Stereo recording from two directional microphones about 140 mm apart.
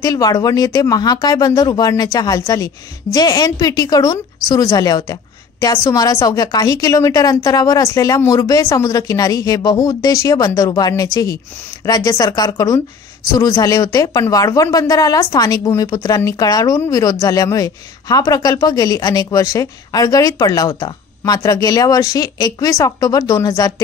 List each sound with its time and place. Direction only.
0.0 s speech: 25° left (ahead or behind)